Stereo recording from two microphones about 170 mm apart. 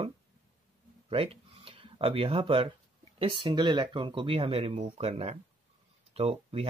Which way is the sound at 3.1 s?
30° right (ahead or behind).